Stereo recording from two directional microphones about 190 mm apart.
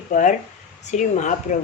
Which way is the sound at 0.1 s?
40° left (ahead or behind).